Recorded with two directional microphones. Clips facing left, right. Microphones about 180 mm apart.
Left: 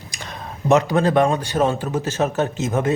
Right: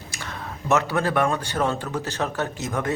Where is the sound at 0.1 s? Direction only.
15° left (ahead or behind).